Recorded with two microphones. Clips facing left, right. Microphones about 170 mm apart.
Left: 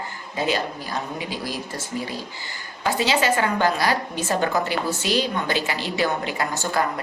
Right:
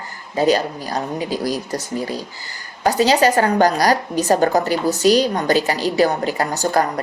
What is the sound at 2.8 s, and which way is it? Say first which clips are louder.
A woman's voice: right 7 dB; 40° right (ahead or behind).